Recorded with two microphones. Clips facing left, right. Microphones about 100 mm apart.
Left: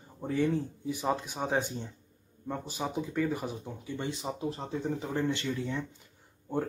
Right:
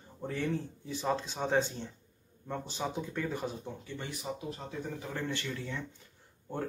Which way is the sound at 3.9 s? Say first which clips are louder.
Left 6 dB; 20° left (ahead or behind).